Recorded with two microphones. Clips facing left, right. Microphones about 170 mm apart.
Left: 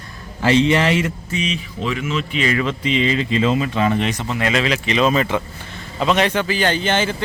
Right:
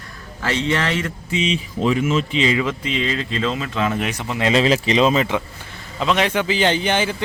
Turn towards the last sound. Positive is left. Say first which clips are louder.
# even
turn(degrees=-15)  # may be behind; listen again after turning